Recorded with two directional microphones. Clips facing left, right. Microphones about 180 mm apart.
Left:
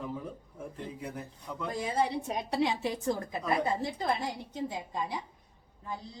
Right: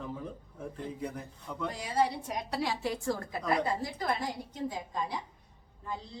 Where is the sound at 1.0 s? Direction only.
5° left (ahead or behind).